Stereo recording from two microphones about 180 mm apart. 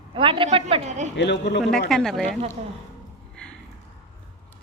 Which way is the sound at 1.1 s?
70° left (ahead or behind).